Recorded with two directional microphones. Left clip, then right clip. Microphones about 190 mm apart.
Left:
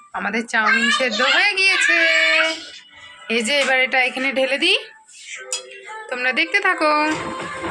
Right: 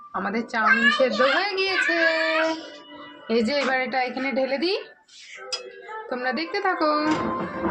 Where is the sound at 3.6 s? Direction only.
30° left (ahead or behind).